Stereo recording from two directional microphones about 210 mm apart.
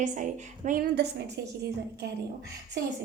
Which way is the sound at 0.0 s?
35° right (ahead or behind).